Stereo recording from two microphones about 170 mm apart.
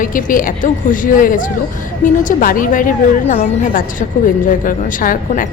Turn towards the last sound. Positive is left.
turn(degrees=55)  # may be behind; listen again after turning